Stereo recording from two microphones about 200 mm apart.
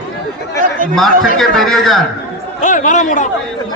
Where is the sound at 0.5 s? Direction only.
45° right (ahead or behind).